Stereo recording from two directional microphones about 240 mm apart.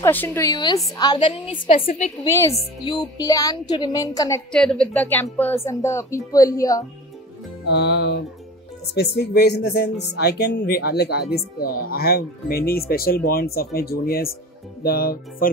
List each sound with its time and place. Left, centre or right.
0.0 s a woman's voice: centre
2.2 s a woman's voice: centre
4.5 s a woman's voice: centre
7.6 s music: left
8.9 s speech: left